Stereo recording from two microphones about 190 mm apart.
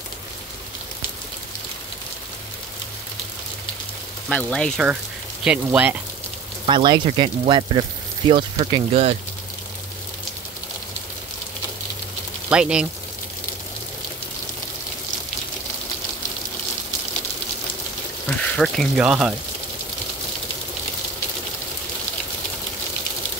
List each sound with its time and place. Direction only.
4.3 s speech: 5° left (ahead or behind)
5.4 s speech: 5° right (ahead or behind)
6.6 s speech: 25° right (ahead or behind)
12.4 s speech: 5° right (ahead or behind)
18.4 s speech: centre (ahead or behind)